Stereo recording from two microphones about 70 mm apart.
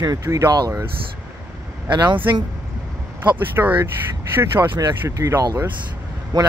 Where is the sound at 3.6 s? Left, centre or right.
Right.